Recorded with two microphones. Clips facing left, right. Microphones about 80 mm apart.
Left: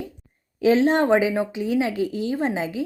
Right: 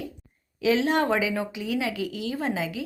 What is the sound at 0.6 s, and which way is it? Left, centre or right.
A woman's voice, left.